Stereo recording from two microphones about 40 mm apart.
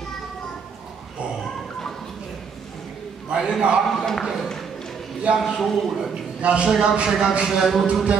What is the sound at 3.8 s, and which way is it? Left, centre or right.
Speech, centre.